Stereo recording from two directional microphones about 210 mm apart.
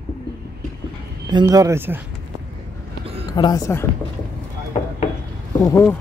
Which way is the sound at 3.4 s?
20° left (ahead or behind).